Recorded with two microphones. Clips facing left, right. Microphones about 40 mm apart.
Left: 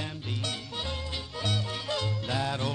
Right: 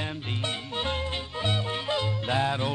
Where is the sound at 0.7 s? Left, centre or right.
Right.